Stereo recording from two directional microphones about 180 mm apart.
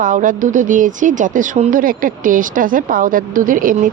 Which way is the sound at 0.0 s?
45° right (ahead or behind).